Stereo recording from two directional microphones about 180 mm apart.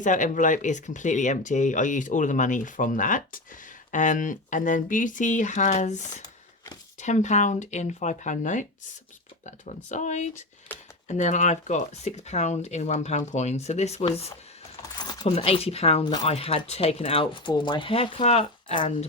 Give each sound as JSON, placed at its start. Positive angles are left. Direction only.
{"t": 0.0, "sound": "speech", "side_deg": 45}
{"t": 14.8, "sound": "a sound", "side_deg": 20}
{"t": 15.3, "sound": "speech", "side_deg": 35}